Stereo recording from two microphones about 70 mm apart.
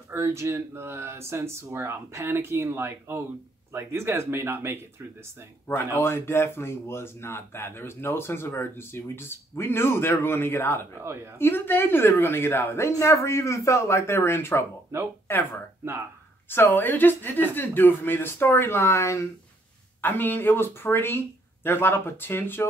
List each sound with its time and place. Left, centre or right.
0.1 s speech: right
5.9 s a woman's voice: left
20.0 s speech: left